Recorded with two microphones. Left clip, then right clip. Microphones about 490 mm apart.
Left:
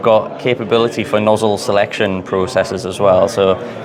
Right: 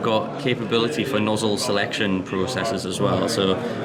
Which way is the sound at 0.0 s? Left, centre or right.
Left.